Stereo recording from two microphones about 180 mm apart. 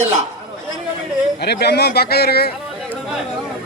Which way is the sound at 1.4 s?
65° left (ahead or behind).